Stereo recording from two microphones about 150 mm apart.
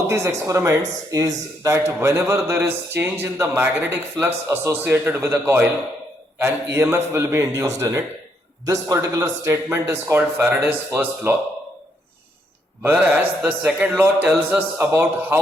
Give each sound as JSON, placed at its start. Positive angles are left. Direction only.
{"t": 0.1, "sound": "speech", "side_deg": -20}
{"t": 12.8, "sound": "speech", "side_deg": -10}